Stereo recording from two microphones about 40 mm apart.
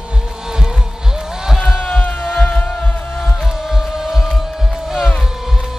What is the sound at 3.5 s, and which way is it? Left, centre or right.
Music, centre.